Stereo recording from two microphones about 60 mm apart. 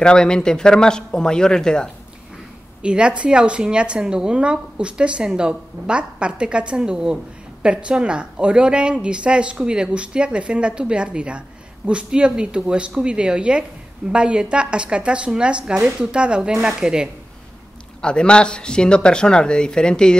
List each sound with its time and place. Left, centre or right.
0.0 s speech: centre
2.8 s speech: centre
18.0 s speech: centre